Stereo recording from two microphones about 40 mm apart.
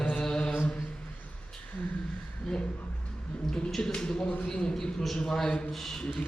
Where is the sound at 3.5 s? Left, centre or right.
Centre.